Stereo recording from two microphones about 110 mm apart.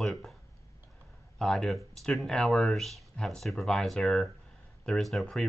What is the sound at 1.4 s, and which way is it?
Speech, 5° left (ahead or behind).